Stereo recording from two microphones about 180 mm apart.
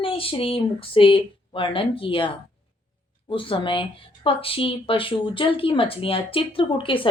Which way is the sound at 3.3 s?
30° left (ahead or behind).